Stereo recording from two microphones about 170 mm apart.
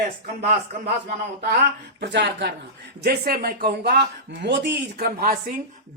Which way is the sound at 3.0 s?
65° right (ahead or behind).